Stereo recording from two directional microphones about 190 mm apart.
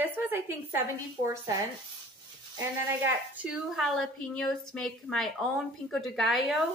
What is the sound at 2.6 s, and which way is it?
A woman's voice, 10° right (ahead or behind).